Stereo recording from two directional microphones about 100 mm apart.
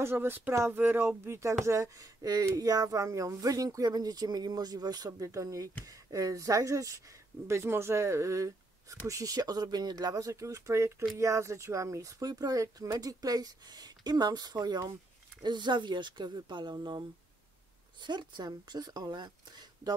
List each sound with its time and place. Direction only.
0.0 s speech: 25° right (ahead or behind); by 17.0 s 45° right (ahead or behind)
18.0 s speech: 50° right (ahead or behind)